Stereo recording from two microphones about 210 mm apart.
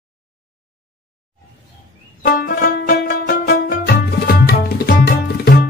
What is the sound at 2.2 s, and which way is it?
Music, 45° left (ahead or behind).